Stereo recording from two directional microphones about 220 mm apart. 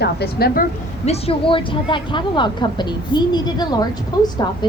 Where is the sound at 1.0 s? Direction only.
25° left (ahead or behind).